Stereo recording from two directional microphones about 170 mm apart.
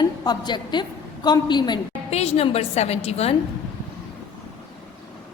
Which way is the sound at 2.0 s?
35° left (ahead or behind).